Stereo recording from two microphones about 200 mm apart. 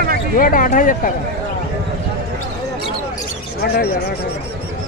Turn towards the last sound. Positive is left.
turn(degrees=50)  # may be behind; listen again after turning